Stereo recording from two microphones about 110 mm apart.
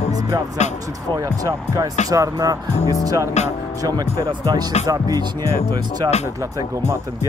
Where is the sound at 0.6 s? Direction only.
90° left.